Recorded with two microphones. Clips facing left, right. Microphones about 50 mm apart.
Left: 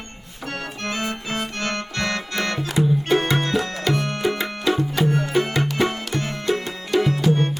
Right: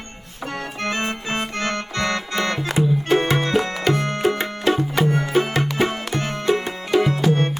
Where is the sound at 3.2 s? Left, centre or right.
Right.